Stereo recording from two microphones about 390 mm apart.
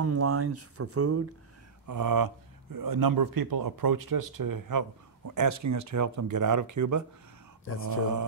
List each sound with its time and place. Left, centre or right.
0.0 s speech: right
1.9 s speech: right